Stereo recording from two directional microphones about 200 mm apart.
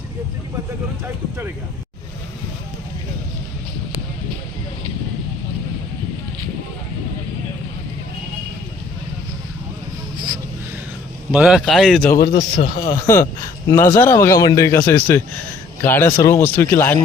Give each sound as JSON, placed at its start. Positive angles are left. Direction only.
{"t": 11.3, "sound": "speech", "side_deg": -5}
{"t": 12.3, "sound": "speech", "side_deg": 40}
{"t": 13.7, "sound": "a man's voice", "side_deg": 15}